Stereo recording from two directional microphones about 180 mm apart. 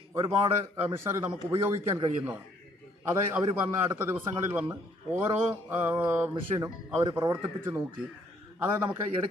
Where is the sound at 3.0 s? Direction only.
15° right (ahead or behind).